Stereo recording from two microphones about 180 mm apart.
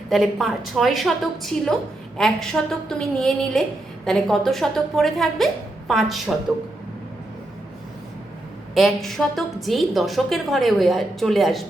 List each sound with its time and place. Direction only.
0.1 s a woman's voice: centre (ahead or behind)
8.7 s a woman's voice: centre (ahead or behind)